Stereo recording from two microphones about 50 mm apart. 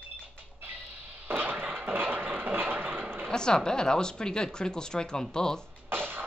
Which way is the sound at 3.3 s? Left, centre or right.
Centre.